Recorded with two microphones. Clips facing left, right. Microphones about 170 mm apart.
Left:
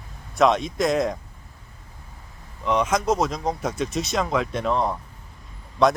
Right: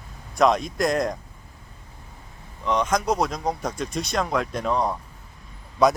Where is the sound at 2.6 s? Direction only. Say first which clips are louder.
Left 1 dB; 5° left (ahead or behind).